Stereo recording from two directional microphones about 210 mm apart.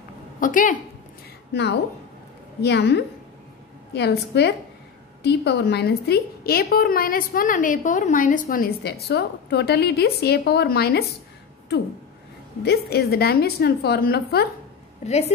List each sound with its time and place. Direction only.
0.4 s a woman's voice: 40° left (ahead or behind)
1.5 s a woman's voice: 55° left (ahead or behind)
12.6 s a woman's voice: 50° left (ahead or behind)
15.0 s a woman's voice: 30° left (ahead or behind)